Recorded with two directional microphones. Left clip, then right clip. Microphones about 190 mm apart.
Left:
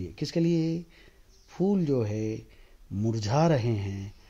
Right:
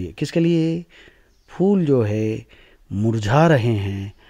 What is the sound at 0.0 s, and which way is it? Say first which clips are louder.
Speech: right 8 dB; 30° right (ahead or behind).